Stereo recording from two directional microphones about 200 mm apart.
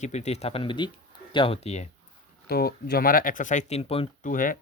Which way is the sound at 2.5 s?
50° left (ahead or behind).